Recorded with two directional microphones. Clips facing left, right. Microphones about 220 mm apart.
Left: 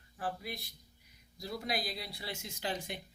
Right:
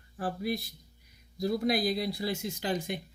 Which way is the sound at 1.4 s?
45° right (ahead or behind).